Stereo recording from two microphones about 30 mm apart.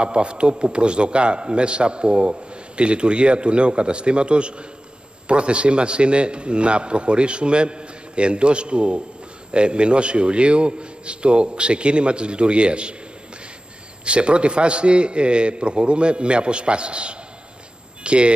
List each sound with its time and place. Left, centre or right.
0.0 s a man's voice: right
14.0 s a man's voice: right